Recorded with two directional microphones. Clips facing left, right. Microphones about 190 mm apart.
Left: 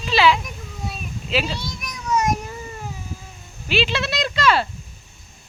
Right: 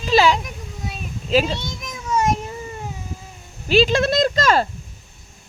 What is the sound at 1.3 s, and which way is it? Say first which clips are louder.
Speech: right 6 dB; 40° right (ahead or behind).